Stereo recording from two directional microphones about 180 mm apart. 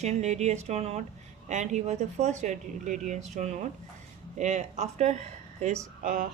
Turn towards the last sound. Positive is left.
turn(degrees=-50)  # may be behind; listen again after turning